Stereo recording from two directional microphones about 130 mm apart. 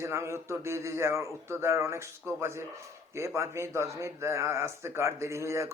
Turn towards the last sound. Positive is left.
turn(degrees=-20)  # may be behind; listen again after turning